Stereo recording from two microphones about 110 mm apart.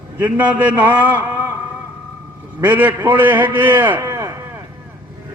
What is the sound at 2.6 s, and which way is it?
A man's voice, 15° right (ahead or behind).